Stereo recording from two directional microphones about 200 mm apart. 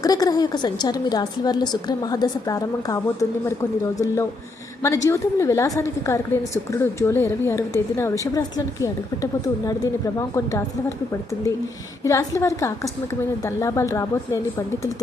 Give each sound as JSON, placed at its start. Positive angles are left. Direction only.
{"t": 0.0, "sound": "a woman's voice", "side_deg": 20}
{"t": 12.0, "sound": "a woman's voice", "side_deg": 15}